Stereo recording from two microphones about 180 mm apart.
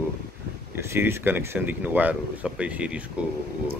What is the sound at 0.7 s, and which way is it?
Speech, 15° right (ahead or behind).